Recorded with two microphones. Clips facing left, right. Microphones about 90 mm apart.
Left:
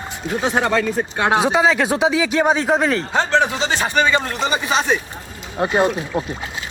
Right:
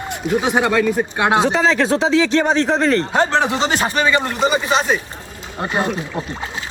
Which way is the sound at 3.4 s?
20° right (ahead or behind).